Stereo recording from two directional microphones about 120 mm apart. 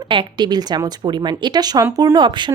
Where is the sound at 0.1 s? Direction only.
40° right (ahead or behind).